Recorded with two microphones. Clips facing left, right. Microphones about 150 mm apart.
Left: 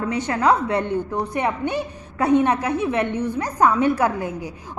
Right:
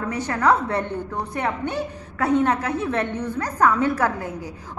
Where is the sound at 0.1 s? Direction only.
20° left (ahead or behind).